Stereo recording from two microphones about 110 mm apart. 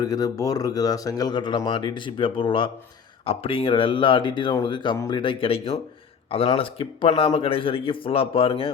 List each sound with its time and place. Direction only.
0.0 s speech: 35° left (ahead or behind); by 8.7 s 55° left (ahead or behind)